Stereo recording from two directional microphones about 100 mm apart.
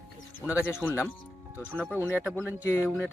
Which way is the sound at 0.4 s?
15° right (ahead or behind).